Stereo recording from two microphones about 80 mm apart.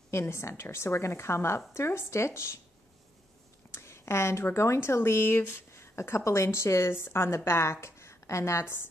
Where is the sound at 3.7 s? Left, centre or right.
Left.